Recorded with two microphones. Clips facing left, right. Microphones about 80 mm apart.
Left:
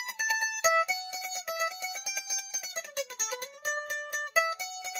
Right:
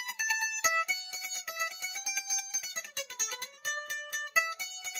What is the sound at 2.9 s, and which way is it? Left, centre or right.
Music, centre.